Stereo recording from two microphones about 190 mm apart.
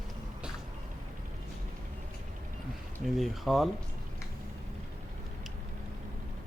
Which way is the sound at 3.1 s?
Centre (ahead or behind).